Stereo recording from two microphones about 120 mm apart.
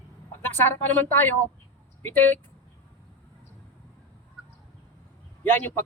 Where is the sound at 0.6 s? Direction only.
15° left (ahead or behind).